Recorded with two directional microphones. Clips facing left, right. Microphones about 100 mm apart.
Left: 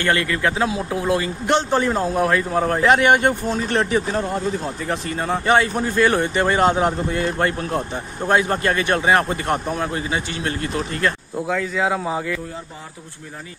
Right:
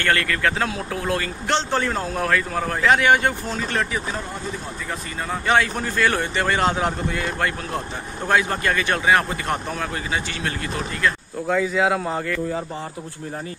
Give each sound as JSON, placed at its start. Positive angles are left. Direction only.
{"t": 0.0, "sound": "speech", "side_deg": 20}
{"t": 5.6, "sound": "speech", "side_deg": 20}
{"t": 8.9, "sound": "speech", "side_deg": 30}
{"t": 9.5, "sound": "speech", "side_deg": 20}
{"t": 11.4, "sound": "speech", "side_deg": -5}